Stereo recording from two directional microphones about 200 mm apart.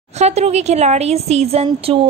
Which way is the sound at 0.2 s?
35° right (ahead or behind).